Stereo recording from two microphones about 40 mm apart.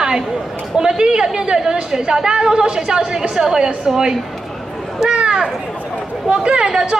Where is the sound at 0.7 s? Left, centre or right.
Centre.